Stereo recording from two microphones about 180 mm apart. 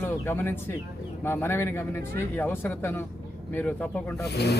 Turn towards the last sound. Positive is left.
turn(degrees=65)  # may be behind; listen again after turning